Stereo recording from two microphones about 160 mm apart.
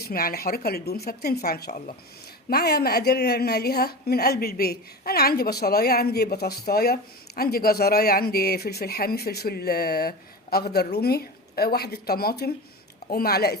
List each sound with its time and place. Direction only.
0.0 s a woman's voice: 70° left (ahead or behind)